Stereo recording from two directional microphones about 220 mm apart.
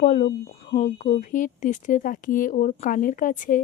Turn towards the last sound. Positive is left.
turn(degrees=35)  # may be behind; listen again after turning